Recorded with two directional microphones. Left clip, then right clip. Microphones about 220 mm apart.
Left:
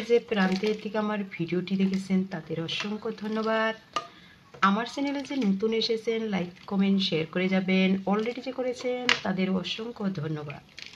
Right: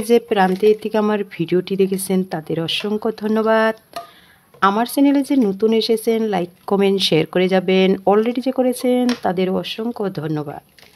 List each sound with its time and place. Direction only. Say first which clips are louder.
0.1 s speech: right 10 dB; 50° right (ahead or behind)